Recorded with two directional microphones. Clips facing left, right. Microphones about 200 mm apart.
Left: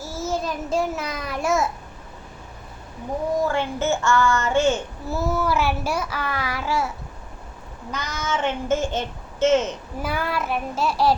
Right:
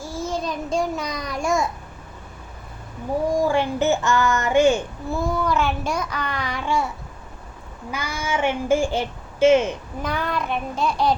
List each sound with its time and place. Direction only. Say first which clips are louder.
0.0 s child singing: even; 5° left (ahead or behind)
3.3 s speech: right 2 dB; 15° right (ahead or behind)
5.0 s a child's voice: even; 5° left (ahead or behind)
7.9 s speech: right 1 dB; 10° right (ahead or behind)
10.0 s a child's voice: even; 5° left (ahead or behind)